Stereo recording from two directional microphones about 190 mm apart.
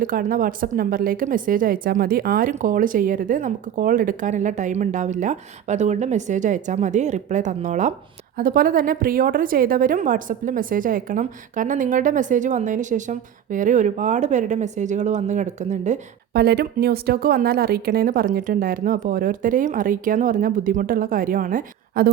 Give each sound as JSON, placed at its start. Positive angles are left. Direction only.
{"t": 0.0, "sound": "speech", "side_deg": -45}
{"t": 16.3, "sound": "speech", "side_deg": -55}